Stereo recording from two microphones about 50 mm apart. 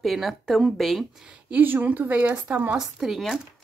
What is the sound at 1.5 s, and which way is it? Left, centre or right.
A woman's voice, right.